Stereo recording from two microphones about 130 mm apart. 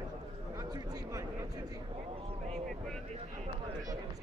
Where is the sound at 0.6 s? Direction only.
30° right (ahead or behind).